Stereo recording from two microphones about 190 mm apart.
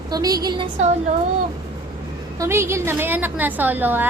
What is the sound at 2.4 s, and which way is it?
A woman's voice, 15° right (ahead or behind).